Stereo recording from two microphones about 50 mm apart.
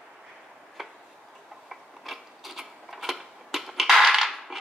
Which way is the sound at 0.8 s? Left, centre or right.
Centre.